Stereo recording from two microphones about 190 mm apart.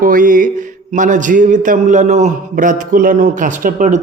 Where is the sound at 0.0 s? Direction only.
45° right (ahead or behind).